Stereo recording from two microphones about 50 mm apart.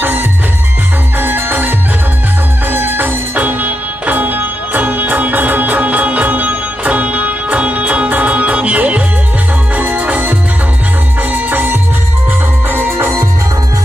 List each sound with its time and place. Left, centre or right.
0.0 s music: right
11.3 s music: right